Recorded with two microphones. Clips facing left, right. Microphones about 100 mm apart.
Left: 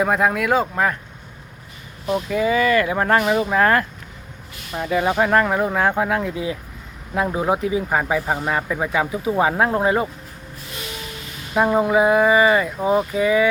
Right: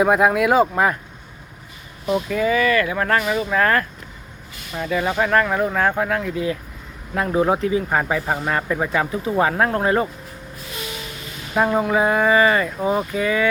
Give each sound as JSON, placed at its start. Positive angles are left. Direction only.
{"t": 0.0, "sound": "speech", "side_deg": -5}
{"t": 2.3, "sound": "speech", "side_deg": 20}
{"t": 11.5, "sound": "speech", "side_deg": 5}